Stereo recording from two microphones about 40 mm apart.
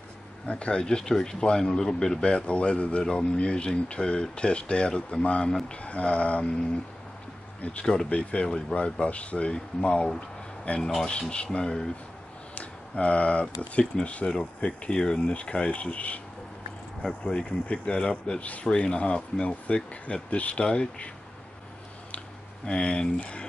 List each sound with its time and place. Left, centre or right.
0.5 s speech: left
7.8 s speech: centre; by 9.5 s left
9.5 s speech: left
12.5 s speech: left
17.2 s speech: left
18.4 s speech: left
18.7 s speech: left
22.7 s speech: left